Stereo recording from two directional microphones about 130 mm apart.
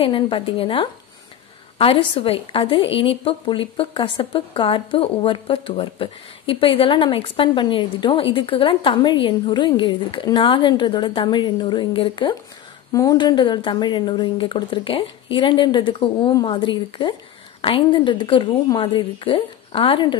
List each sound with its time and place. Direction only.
0.0 s a woman's voice: 45° left (ahead or behind)
12.9 s a woman's voice: 30° left (ahead or behind)